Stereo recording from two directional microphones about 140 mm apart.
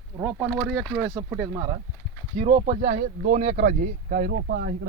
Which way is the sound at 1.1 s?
15° right (ahead or behind).